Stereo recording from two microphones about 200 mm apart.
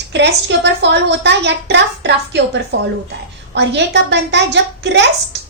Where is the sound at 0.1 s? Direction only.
60° right (ahead or behind).